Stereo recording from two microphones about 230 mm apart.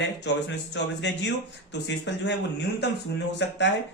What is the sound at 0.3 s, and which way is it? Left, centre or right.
Speech, left.